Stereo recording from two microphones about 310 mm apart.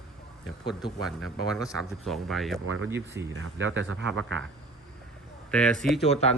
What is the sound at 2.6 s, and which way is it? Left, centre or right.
Speech, right.